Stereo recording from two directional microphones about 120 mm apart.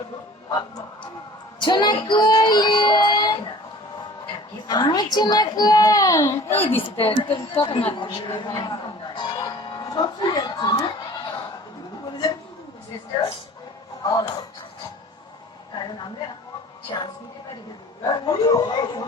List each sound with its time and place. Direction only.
1.5 s female singing: 40° left (ahead or behind)
4.7 s a child's voice: 35° left (ahead or behind); by 6.7 s 20° left (ahead or behind)
6.7 s a woman's voice: 50° left (ahead or behind)
7.3 s a sound: 45° left (ahead or behind)
14.0 s a child's voice: 35° left (ahead or behind)
15.7 s a sound: 40° left (ahead or behind)
16.9 s a child's voice: 35° left (ahead or behind)